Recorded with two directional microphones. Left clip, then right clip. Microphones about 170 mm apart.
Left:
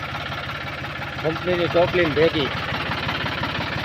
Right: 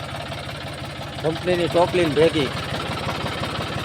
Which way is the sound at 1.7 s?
20° right (ahead or behind).